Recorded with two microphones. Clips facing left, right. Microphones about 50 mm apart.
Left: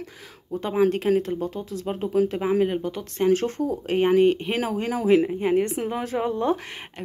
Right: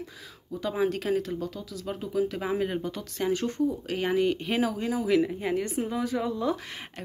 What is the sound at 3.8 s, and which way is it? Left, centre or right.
Speech, left.